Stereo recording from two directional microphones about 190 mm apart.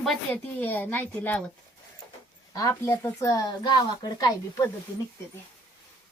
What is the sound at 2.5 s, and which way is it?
Speech, 15° left (ahead or behind).